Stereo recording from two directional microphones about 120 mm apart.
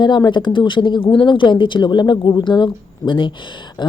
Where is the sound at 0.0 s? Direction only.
40° left (ahead or behind).